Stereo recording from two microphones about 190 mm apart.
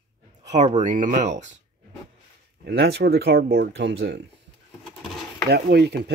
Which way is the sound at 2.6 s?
55° right (ahead or behind).